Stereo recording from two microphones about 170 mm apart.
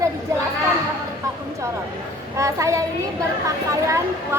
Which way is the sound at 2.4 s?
20° right (ahead or behind).